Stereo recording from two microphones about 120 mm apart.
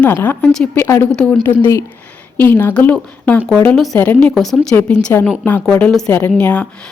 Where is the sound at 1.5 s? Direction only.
20° left (ahead or behind).